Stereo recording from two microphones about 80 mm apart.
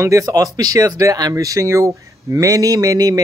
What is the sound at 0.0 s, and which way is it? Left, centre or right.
Speech, right.